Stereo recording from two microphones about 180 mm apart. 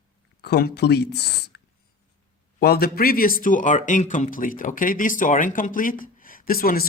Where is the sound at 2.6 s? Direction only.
60° left (ahead or behind).